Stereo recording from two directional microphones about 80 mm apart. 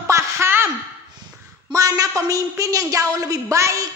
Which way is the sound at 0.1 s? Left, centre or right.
Right.